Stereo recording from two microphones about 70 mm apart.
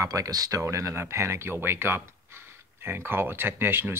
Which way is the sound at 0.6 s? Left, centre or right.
Right.